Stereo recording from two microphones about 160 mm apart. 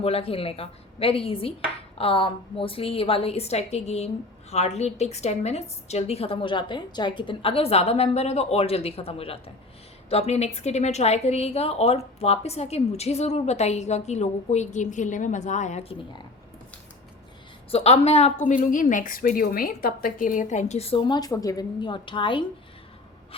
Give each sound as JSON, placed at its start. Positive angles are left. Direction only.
{"t": 0.0, "sound": "a woman's voice", "side_deg": 35}
{"t": 17.7, "sound": "a woman's voice", "side_deg": 40}
{"t": 21.1, "sound": "a woman's voice", "side_deg": 25}
{"t": 23.3, "sound": "a sound", "side_deg": 35}